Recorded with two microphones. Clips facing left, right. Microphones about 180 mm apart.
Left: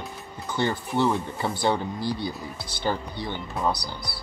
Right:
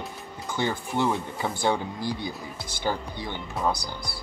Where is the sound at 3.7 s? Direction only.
50° right (ahead or behind).